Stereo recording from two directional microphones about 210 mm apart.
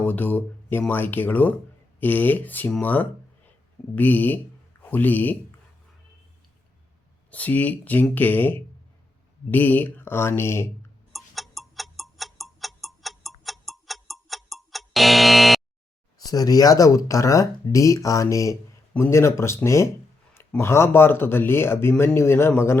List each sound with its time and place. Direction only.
0.0 s a man's voice: 10° left (ahead or behind)
7.3 s speech: 5° left (ahead or behind)
11.1 s tick-tock: centre (ahead or behind)
16.1 s speech: 15° left (ahead or behind)